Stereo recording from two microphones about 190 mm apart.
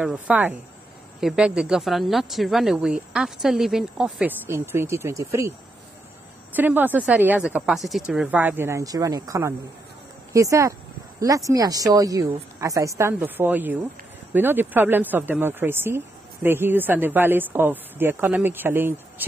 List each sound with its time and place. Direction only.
0.0 s speech: 5° right (ahead or behind)
6.5 s speech: 10° right (ahead or behind)